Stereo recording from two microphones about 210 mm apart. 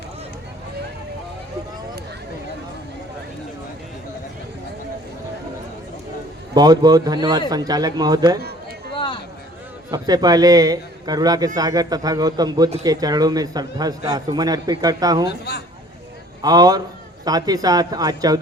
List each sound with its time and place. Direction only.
6.5 s a man's voice: 20° right (ahead or behind)
9.9 s a man's voice: 20° right (ahead or behind)
16.4 s a man's voice: 20° right (ahead or behind)